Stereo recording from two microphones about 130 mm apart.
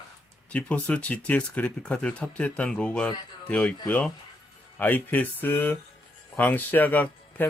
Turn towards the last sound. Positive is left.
turn(degrees=15)  # may be behind; listen again after turning